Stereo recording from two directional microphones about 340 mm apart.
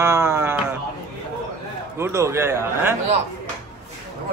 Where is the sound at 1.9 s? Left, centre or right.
Centre.